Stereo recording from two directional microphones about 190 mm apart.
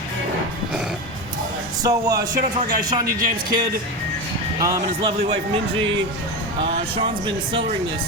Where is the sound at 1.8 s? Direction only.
20° right (ahead or behind).